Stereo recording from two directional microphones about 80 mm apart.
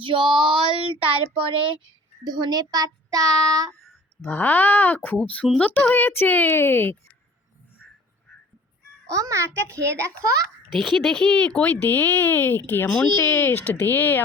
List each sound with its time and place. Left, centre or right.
0.0 s female singing: right
1.3 s a child's voice: right
2.2 s child singing: right
4.2 s speech: left
9.0 s a child's voice: right
10.8 s speech: centre; by 14.3 s left